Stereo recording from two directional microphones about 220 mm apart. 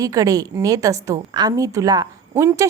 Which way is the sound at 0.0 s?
15° right (ahead or behind).